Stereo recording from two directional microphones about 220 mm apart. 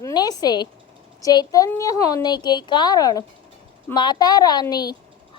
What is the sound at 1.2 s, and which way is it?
A woman's voice, 15° left (ahead or behind).